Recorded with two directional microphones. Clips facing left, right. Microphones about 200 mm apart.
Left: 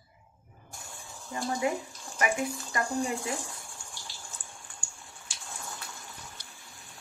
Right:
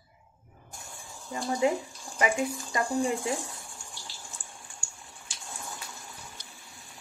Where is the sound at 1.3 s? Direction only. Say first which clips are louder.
Right 3 dB; 25° right (ahead or behind).